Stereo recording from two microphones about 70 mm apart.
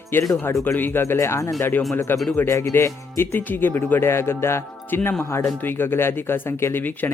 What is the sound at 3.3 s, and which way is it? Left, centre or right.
Speech, left.